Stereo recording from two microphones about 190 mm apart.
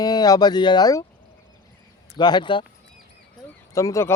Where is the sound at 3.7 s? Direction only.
15° left (ahead or behind).